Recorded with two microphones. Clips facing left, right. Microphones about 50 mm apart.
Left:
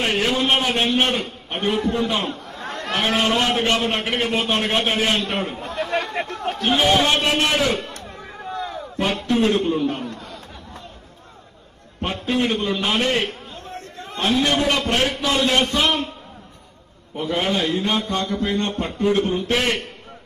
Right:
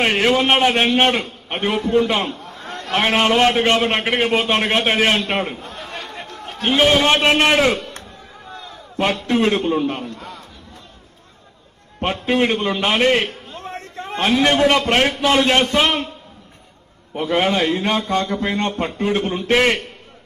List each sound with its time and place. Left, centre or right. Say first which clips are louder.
0.0 s a man's voice: right 4 dB; right
2.6 s a sound: left 2 dB; left
2.9 s a man's voice: right 4 dB; right
5.6 s chatter: left 7 dB; left
7.1 s a man's voice: right 5 dB; right
8.5 s slam: left 10 dB; left
9.4 s a man's voice: right 1 dB; right
12.0 s a man's voice: right 4 dB; right
14.7 s a man's voice: right 4 dB; right
17.1 s a man's voice: right 4 dB; right